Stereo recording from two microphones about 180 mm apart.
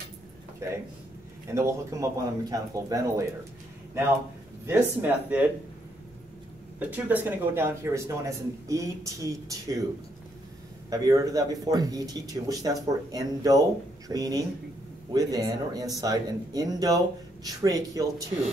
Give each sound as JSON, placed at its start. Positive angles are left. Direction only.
{"t": 1.5, "sound": "speech", "side_deg": -15}
{"t": 4.6, "sound": "speech", "side_deg": -10}
{"t": 6.8, "sound": "speech", "side_deg": -10}
{"t": 10.9, "sound": "speech", "side_deg": -20}